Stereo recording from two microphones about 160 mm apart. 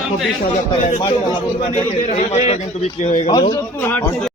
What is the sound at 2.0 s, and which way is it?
A man's voice, 45° left (ahead or behind).